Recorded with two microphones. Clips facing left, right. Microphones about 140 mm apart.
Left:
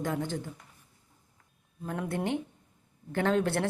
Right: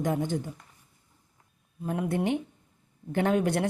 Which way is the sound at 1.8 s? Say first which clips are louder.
Right 4 dB; 15° right (ahead or behind).